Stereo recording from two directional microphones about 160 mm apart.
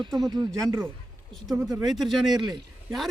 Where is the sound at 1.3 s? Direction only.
Centre (ahead or behind).